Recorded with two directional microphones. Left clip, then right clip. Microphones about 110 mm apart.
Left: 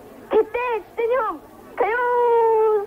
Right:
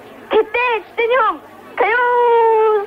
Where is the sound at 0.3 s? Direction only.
35° right (ahead or behind).